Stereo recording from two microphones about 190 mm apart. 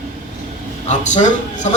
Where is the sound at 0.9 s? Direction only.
40° left (ahead or behind).